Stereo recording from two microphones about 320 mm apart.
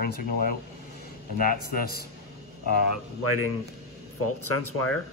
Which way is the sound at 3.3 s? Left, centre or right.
Left.